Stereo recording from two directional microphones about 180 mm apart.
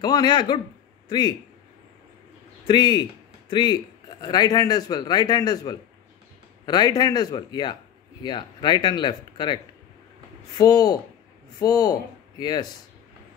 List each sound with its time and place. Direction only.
0.0 s a man's voice: 25° left (ahead or behind)
2.6 s speech: 25° left (ahead or behind)
10.6 s speech: 20° left (ahead or behind)